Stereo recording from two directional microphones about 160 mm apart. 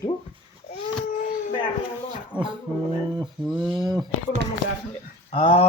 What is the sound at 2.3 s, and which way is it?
Speech, 30° right (ahead or behind).